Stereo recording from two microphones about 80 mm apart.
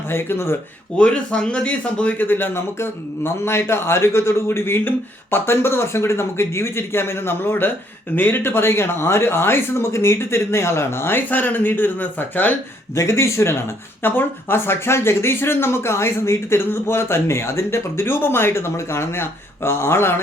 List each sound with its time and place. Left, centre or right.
0.1 s speech: left
0.9 s speech: centre
13.0 s speech: left